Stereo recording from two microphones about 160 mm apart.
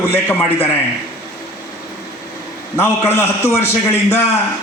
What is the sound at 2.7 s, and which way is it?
Speech, 15° left (ahead or behind).